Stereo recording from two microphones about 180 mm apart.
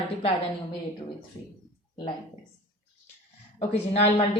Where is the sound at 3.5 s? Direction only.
35° left (ahead or behind).